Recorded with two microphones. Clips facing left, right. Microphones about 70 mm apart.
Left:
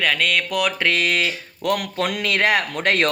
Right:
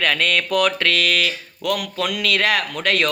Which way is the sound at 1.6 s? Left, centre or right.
Left.